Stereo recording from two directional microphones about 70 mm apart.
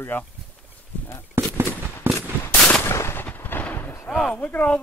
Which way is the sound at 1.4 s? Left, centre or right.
Right.